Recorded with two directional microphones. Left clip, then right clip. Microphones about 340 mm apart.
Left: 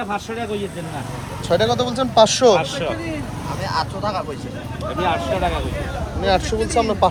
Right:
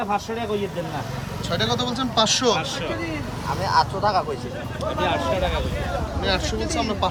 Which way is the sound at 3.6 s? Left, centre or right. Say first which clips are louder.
Right 3 dB; right.